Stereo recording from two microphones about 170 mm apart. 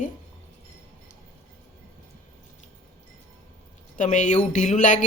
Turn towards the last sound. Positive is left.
turn(degrees=45)  # may be behind; listen again after turning